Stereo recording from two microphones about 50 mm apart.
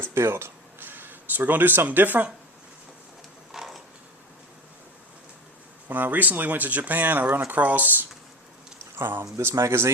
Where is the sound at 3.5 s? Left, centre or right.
Centre.